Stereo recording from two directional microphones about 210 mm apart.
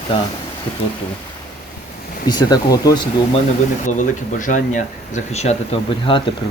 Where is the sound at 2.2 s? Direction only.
20° left (ahead or behind).